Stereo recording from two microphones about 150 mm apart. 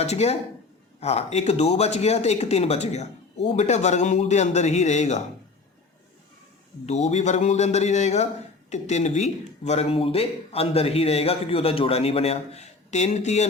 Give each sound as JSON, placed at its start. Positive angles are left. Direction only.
{"t": 0.0, "sound": "speech", "side_deg": 45}
{"t": 6.8, "sound": "speech", "side_deg": 45}